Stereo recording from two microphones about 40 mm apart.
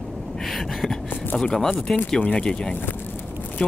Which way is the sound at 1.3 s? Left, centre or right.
Centre.